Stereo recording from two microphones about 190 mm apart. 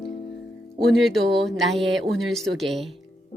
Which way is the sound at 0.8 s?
Centre (ahead or behind).